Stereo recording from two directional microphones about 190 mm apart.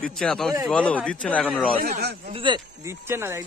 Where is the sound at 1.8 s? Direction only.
55° right (ahead or behind).